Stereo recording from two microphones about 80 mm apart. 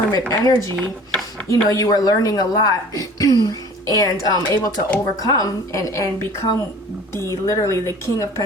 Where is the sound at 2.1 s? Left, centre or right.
Left.